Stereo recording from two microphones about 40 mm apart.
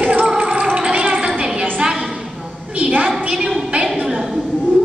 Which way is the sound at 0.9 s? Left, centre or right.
Right.